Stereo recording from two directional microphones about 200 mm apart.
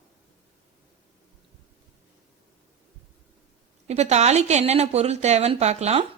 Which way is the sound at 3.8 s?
35° right (ahead or behind).